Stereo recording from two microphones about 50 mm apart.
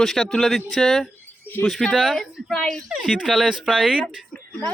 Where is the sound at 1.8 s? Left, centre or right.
Centre.